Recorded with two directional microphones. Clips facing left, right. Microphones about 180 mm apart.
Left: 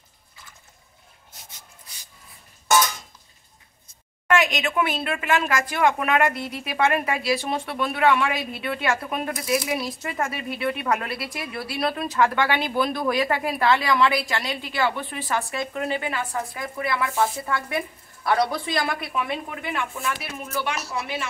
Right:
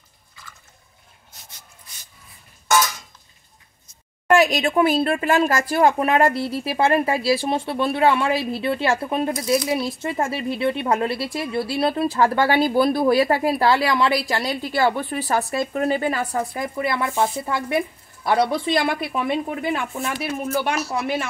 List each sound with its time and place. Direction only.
4.3 s speech: 35° right (ahead or behind)